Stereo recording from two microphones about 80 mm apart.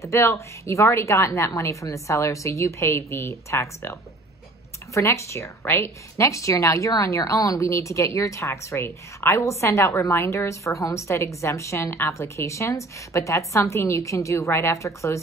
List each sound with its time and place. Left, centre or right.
0.0 s a woman's voice: left
4.9 s a woman's voice: left